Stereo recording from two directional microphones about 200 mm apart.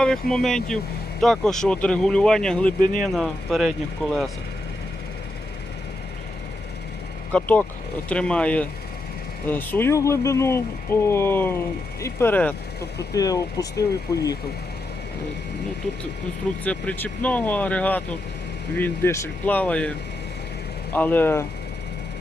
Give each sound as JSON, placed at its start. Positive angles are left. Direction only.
{"t": 0.0, "sound": "speech", "side_deg": 5}
{"t": 7.3, "sound": "speech", "side_deg": 10}
{"t": 16.6, "sound": "speech", "side_deg": 10}
{"t": 20.9, "sound": "speech", "side_deg": 10}